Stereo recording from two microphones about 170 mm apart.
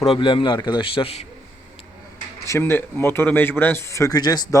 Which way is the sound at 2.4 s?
15° left (ahead or behind).